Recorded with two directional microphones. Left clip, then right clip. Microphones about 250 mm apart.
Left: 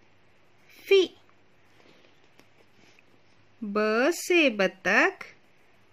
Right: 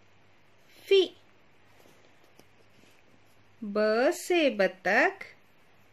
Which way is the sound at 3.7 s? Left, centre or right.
Left.